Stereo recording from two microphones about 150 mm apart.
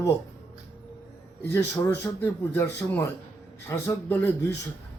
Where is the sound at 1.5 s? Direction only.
15° left (ahead or behind).